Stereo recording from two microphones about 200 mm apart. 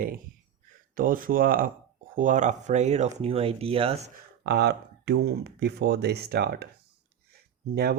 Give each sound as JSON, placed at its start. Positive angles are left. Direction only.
{"t": 0.9, "sound": "speech", "side_deg": -45}
{"t": 4.4, "sound": "speech", "side_deg": -55}
{"t": 7.3, "sound": "a sound", "side_deg": -50}